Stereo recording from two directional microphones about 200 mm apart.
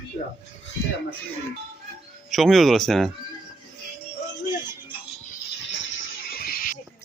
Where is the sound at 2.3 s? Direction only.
Centre (ahead or behind).